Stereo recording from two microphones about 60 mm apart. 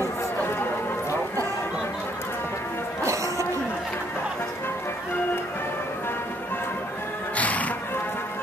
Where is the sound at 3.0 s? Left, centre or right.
Right.